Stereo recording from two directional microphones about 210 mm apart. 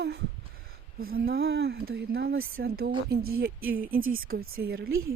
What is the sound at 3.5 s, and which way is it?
Speech, 70° right (ahead or behind).